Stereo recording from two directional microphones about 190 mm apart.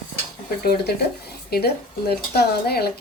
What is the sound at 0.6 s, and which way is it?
Speech, 55° left (ahead or behind).